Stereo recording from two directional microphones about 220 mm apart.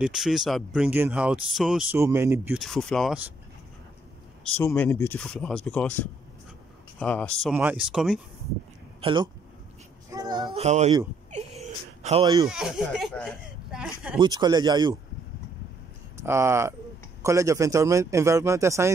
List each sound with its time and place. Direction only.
0.0 s speech: centre (ahead or behind)
2.6 s speech: centre (ahead or behind)
4.6 s speech: 10° left (ahead or behind)
9.0 s speech: 20° right (ahead or behind)
10.1 s a sound: 20° right (ahead or behind)
12.4 s speech: centre (ahead or behind)
14.2 s speech: 20° right (ahead or behind)
16.2 s a man's voice: 10° right (ahead or behind)